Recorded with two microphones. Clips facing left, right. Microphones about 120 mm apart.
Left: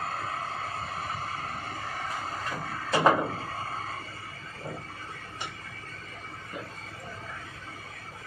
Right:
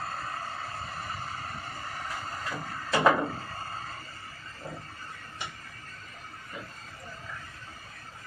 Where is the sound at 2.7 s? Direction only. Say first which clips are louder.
Left 1 dB; 90° left.